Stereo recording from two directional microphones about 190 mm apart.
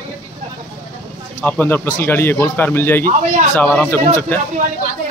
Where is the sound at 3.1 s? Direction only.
40° right (ahead or behind).